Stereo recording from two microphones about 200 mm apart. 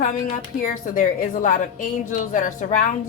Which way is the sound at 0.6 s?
40° left (ahead or behind).